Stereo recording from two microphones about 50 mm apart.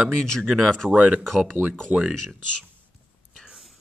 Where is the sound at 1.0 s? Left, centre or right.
Right.